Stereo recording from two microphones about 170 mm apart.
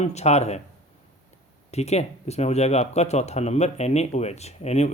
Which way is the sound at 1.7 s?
40° left (ahead or behind).